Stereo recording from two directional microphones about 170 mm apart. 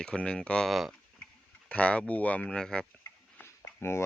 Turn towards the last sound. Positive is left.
turn(degrees=15)  # may be behind; listen again after turning